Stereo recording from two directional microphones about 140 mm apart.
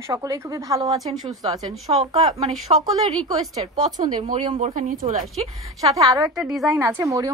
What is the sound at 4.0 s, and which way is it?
A woman's voice, 50° right (ahead or behind).